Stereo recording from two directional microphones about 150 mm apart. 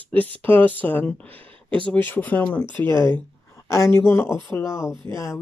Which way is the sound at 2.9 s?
30° right (ahead or behind).